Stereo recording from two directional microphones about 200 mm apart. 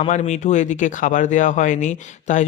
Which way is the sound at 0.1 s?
35° left (ahead or behind).